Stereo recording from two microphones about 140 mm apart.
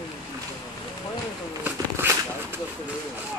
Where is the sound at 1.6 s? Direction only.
15° right (ahead or behind).